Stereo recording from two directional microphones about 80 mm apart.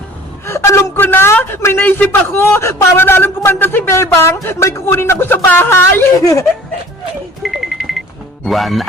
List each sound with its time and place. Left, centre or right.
0.4 s a woman's voice: left
6.1 s speech: left
7.4 s alarm clock: centre
8.4 s music: centre